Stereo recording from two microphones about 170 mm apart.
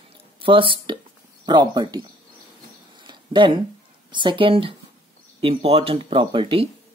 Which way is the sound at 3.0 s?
25° right (ahead or behind).